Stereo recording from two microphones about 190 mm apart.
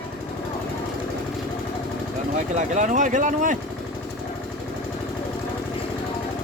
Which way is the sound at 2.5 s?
40° right (ahead or behind).